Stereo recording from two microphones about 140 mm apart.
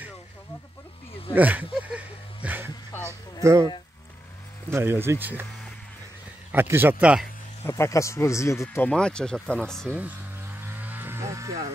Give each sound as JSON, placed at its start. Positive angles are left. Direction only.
{"t": 1.3, "sound": "a sound", "side_deg": -10}
{"t": 3.4, "sound": "speech", "side_deg": -20}
{"t": 6.5, "sound": "speech", "side_deg": -15}
{"t": 7.6, "sound": "speech", "side_deg": 20}
{"t": 8.9, "sound": "speech", "side_deg": 5}
{"t": 9.9, "sound": "cattle", "side_deg": -15}